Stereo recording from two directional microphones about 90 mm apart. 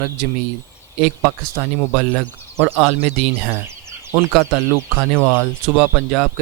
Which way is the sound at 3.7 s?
30° right (ahead or behind).